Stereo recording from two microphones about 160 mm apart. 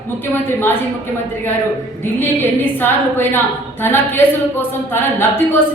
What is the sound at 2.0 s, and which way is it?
Speech, 15° left (ahead or behind).